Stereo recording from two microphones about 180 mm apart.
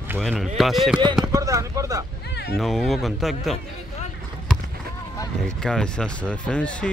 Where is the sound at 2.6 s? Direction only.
Centre (ahead or behind).